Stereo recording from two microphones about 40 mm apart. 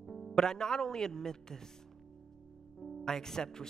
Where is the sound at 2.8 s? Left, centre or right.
Centre.